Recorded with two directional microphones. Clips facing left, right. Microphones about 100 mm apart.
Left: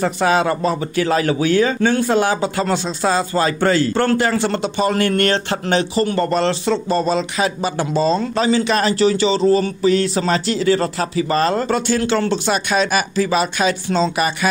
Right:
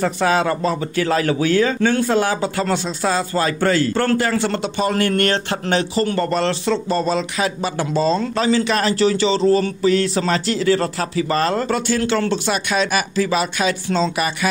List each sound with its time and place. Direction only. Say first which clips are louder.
0.0 s speech: left 1 dB; 20° left (ahead or behind)